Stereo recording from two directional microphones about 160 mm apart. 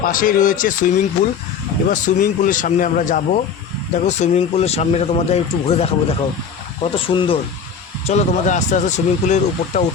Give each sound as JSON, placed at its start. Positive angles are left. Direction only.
{"t": 0.0, "sound": "speech", "side_deg": 60}
{"t": 8.0, "sound": "speech", "side_deg": 45}